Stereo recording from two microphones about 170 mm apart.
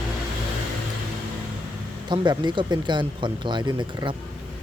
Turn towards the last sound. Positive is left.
turn(degrees=-25)  # may be behind; listen again after turning